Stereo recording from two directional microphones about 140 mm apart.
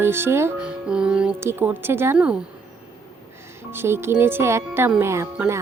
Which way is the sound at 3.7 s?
15° right (ahead or behind).